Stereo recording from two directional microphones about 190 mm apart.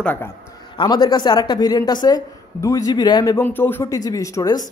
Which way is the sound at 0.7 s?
20° left (ahead or behind).